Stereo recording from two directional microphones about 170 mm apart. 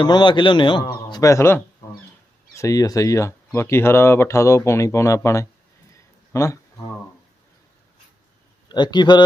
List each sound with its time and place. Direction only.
0.0 s a man's voice: 25° left (ahead or behind)
5.9 s a sound: 20° left (ahead or behind)
8.7 s a man's voice: 25° left (ahead or behind)